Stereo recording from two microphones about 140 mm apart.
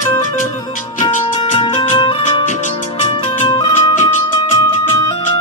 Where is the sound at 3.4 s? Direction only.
35° left (ahead or behind).